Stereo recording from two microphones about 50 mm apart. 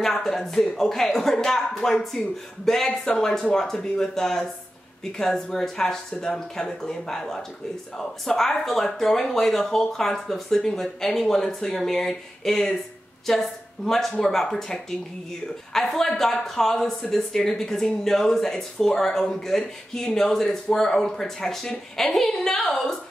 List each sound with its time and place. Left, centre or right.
0.0 s speech: centre